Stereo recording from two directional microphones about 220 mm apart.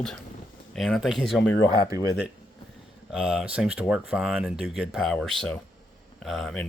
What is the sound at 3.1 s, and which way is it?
Speech, 5° right (ahead or behind).